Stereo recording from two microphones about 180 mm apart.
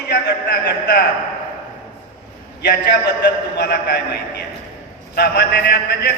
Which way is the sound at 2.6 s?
65° left (ahead or behind).